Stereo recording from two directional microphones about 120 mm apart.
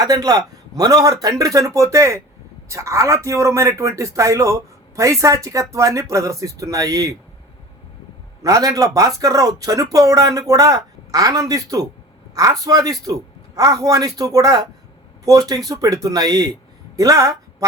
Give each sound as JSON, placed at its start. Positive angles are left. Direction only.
{"t": 0.0, "sound": "speech", "side_deg": -30}
{"t": 8.4, "sound": "speech", "side_deg": -30}